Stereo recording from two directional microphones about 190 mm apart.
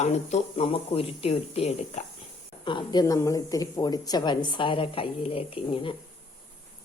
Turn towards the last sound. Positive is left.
turn(degrees=25)  # may be behind; listen again after turning